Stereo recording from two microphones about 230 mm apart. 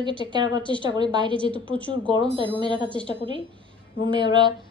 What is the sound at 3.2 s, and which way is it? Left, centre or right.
A woman's voice, right.